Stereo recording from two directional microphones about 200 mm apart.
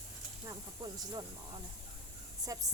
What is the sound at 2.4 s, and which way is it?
Speech, 15° right (ahead or behind).